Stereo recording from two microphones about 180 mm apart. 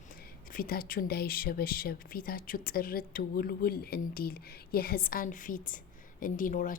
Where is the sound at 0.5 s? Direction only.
55° left (ahead or behind).